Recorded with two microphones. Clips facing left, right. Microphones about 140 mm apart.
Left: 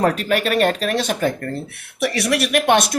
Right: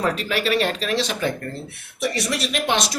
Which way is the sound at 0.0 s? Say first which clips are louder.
Left 4 dB; 50° left (ahead or behind).